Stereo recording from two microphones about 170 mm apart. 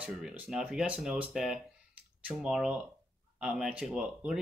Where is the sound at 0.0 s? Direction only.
5° right (ahead or behind).